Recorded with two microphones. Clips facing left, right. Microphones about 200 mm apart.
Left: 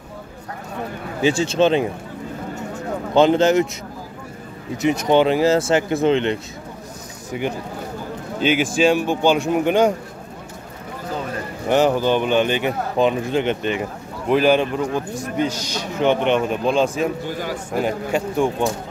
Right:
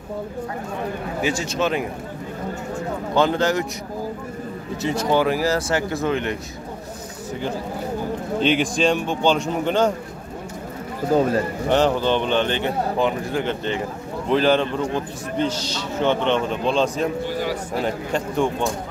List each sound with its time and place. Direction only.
1.2 s speech: 30° left (ahead or behind)
3.2 s speech: 20° left (ahead or behind)
4.8 s speech: 20° left (ahead or behind)
8.4 s a man's voice: 5° left (ahead or behind)
11.1 s speech: 45° right (ahead or behind)
11.7 s a man's voice: 10° left (ahead or behind)
17.3 s a sound: 45° left (ahead or behind)
17.8 s a man's voice: 10° left (ahead or behind)